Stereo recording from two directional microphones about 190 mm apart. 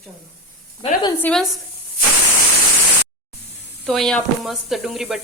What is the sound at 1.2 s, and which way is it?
Speech, centre (ahead or behind).